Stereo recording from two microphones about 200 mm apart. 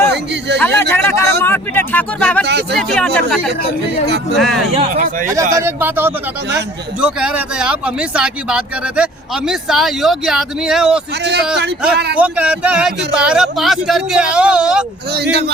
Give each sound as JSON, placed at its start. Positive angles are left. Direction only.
{"t": 0.1, "sound": "speech", "side_deg": -60}
{"t": 0.6, "sound": "speech", "side_deg": 10}
{"t": 2.4, "sound": "speech", "side_deg": -55}
{"t": 2.7, "sound": "speech", "side_deg": 5}
{"t": 4.7, "sound": "speech", "side_deg": -30}
{"t": 5.3, "sound": "a man's voice", "side_deg": -15}
{"t": 11.2, "sound": "speech", "side_deg": -55}
{"t": 12.1, "sound": "speech", "side_deg": -5}
{"t": 15.1, "sound": "speech", "side_deg": -55}